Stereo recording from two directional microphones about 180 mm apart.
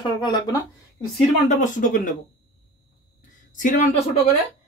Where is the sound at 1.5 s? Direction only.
40° left (ahead or behind).